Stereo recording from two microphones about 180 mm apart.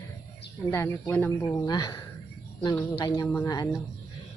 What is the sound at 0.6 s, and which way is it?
Speech, 15° left (ahead or behind).